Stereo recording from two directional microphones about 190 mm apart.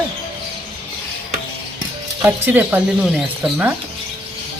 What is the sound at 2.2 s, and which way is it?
Speech, 10° right (ahead or behind).